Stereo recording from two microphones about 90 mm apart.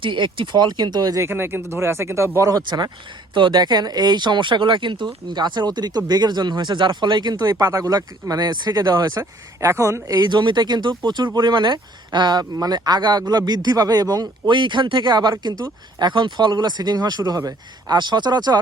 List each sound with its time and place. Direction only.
0.0 s speech: 65° right (ahead or behind); by 1.3 s 40° right (ahead or behind)
1.3 s speech: 25° right (ahead or behind)
2.6 s speech: 50° right (ahead or behind)
7.5 s speech: 35° right (ahead or behind)
10.2 s speech: 55° right (ahead or behind)
14.4 s speech: 60° right (ahead or behind)